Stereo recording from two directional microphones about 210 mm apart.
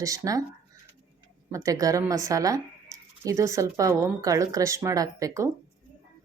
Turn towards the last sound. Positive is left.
turn(degrees=-15)  # may be behind; listen again after turning